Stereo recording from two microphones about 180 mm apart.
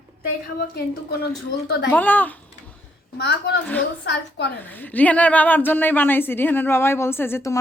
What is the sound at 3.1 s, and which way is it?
A woman's voice, 80° left.